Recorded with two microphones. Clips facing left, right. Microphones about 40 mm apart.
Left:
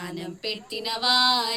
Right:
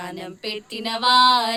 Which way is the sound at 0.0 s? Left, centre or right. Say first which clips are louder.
Right 2 dB; right.